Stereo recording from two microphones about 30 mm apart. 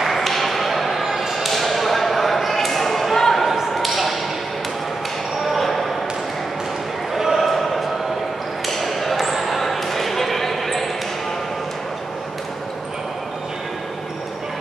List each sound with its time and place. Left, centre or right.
0.0 s ping: centre
1.5 s basketball bounce: centre
3.7 s a sound: centre
5.5 s basketball bounce: centre
7.2 s a sound: centre
7.4 s chant: centre
8.6 s basketball bounce: centre